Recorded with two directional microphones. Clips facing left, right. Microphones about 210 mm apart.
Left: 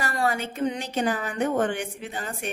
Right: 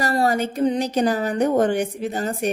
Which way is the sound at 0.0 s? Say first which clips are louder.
Right 6 dB; 40° right (ahead or behind).